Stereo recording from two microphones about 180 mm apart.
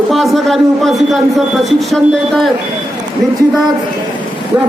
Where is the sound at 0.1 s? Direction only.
Centre (ahead or behind).